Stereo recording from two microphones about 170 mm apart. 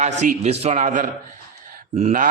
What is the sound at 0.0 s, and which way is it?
A man's voice, 45° right (ahead or behind).